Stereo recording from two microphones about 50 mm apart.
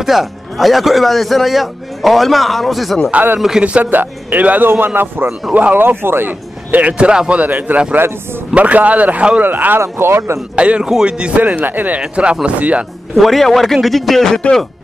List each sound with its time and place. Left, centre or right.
0.0 s a man's voice: centre
3.8 s a man's voice: right
6.8 s speech: right
9.4 s speech: right
9.8 s speech: right
10.5 s speech: right
12.2 s speech: right
13.1 s a man's voice: centre